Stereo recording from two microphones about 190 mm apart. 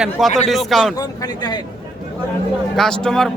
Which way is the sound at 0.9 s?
20° left (ahead or behind).